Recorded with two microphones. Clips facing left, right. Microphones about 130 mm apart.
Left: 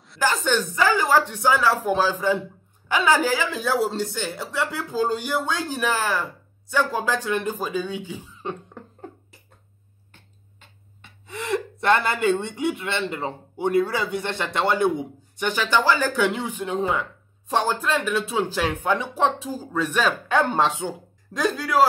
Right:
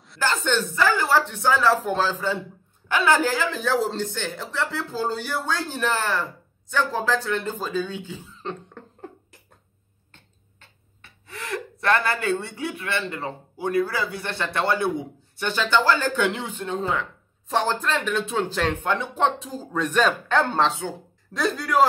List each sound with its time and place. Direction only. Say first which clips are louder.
0.2 s speech: left 1 dB; 10° left (ahead or behind)
10.1 s speech: left 1 dB; 15° left (ahead or behind)